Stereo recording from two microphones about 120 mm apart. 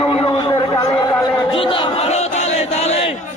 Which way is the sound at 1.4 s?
50° left (ahead or behind).